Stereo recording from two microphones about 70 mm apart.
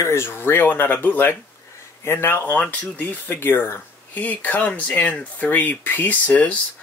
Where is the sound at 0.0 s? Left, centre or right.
Left.